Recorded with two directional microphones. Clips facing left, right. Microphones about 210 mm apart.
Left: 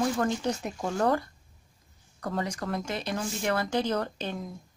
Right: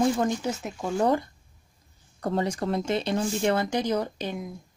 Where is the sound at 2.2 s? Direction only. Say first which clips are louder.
Right 5 dB; 30° right (ahead or behind).